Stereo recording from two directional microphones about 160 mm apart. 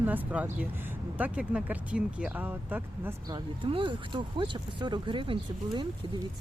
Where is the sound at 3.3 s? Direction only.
30° right (ahead or behind).